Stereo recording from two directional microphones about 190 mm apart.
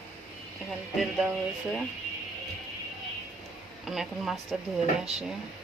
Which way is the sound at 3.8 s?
Centre (ahead or behind).